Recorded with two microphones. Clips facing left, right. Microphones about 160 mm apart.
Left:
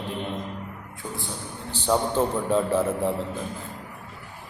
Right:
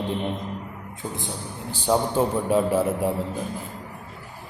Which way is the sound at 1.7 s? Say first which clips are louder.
Right 1 dB; 10° right (ahead or behind).